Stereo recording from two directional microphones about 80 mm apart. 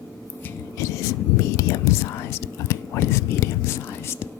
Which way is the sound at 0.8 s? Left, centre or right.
Left.